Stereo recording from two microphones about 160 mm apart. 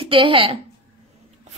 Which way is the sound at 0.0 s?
35° right (ahead or behind).